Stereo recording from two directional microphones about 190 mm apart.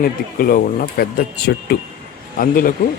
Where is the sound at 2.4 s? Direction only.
45° left (ahead or behind).